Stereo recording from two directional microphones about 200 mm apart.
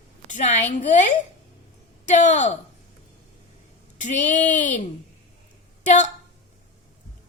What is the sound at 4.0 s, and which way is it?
Speech, 40° left (ahead or behind).